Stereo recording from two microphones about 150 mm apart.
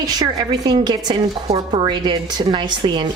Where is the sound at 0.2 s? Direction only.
25° right (ahead or behind).